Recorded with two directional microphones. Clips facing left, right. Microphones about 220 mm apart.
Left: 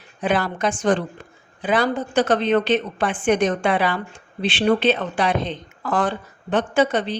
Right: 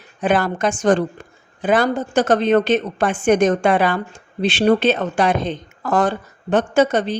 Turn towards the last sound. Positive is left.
turn(degrees=-45)  # may be behind; listen again after turning